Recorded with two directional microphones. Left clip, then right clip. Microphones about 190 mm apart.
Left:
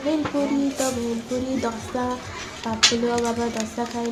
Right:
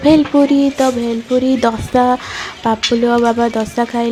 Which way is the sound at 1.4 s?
50° right (ahead or behind).